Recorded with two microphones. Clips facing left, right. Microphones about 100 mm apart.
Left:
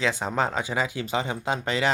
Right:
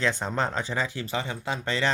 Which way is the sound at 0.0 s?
5° left (ahead or behind).